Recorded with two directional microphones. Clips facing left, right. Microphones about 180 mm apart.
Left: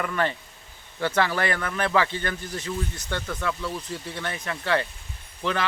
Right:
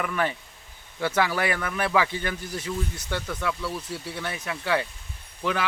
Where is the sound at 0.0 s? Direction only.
5° right (ahead or behind).